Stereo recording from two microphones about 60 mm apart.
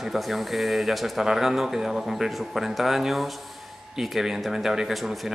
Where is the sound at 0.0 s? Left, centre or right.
Centre.